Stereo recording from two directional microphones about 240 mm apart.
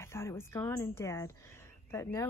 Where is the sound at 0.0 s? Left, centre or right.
Centre.